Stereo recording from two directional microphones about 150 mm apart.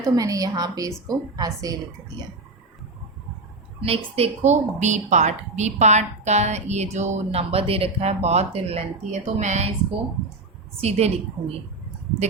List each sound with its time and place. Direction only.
0.0 s a woman's voice: 25° right (ahead or behind)
3.8 s a woman's voice: 40° right (ahead or behind)
10.8 s a woman's voice: 45° right (ahead or behind)